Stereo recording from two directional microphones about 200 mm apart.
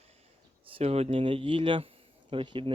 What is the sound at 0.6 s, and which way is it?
Speech, 30° right (ahead or behind).